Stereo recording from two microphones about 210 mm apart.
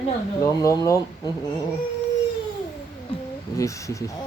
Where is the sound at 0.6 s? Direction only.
15° left (ahead or behind).